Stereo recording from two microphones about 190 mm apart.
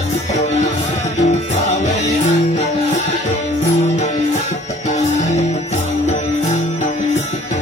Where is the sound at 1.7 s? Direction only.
40° left (ahead or behind).